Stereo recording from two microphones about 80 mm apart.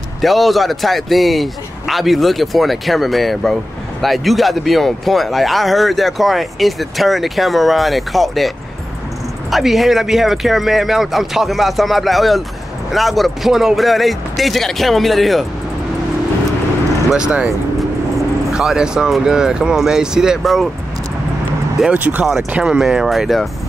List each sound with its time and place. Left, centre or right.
0.2 s speech: centre
17.1 s speech: centre
18.5 s speech: centre
21.9 s speech: right
22.2 s speech: centre